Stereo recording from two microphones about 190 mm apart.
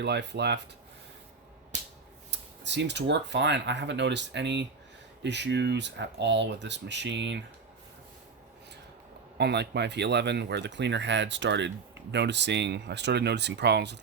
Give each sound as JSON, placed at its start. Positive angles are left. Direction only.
{"t": 0.0, "sound": "speech", "side_deg": -65}
{"t": 2.6, "sound": "speech", "side_deg": -65}
{"t": 9.4, "sound": "speech", "side_deg": -60}